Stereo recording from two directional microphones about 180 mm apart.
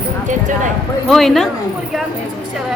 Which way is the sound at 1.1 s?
Centre (ahead or behind).